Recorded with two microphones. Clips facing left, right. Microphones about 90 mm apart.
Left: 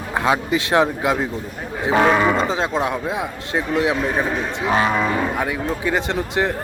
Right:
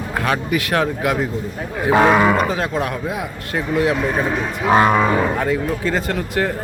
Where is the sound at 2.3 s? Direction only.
20° left (ahead or behind).